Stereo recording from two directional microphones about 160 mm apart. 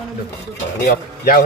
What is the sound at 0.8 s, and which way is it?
Speech, 70° left (ahead or behind).